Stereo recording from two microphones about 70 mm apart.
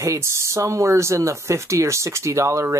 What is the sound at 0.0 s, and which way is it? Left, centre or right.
Speech, right.